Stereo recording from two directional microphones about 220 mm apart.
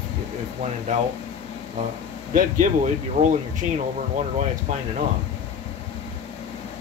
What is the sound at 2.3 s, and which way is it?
Speech, 35° right (ahead or behind).